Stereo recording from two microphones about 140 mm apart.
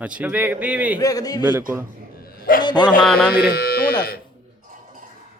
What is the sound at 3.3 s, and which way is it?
Speech, 90° left.